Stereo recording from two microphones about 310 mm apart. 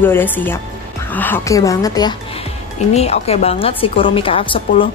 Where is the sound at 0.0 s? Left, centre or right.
Centre.